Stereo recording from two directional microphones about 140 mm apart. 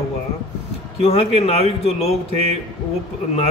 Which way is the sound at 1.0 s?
45° left (ahead or behind).